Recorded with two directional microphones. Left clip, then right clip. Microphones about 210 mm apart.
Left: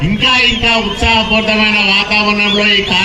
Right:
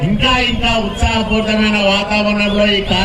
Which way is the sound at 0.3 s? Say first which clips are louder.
Left 4 dB; 55° right (ahead or behind).